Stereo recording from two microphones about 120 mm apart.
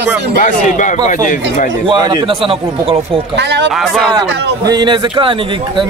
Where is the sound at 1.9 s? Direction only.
45° right (ahead or behind).